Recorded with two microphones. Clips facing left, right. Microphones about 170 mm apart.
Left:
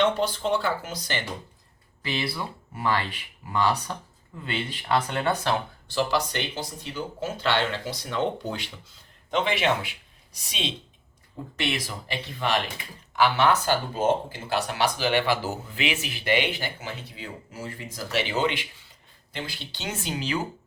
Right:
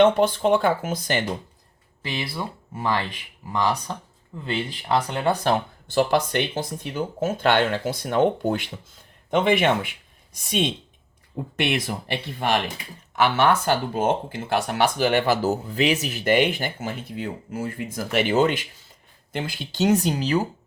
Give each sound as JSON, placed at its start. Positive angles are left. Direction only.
{"t": 0.0, "sound": "speech", "side_deg": -55}
{"t": 2.1, "sound": "speech", "side_deg": -20}
{"t": 5.3, "sound": "speech", "side_deg": -35}
{"t": 5.9, "sound": "speech", "side_deg": -50}
{"t": 13.2, "sound": "speech", "side_deg": -55}